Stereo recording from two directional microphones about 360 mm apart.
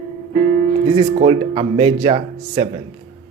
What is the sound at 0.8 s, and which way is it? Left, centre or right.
Speech, centre.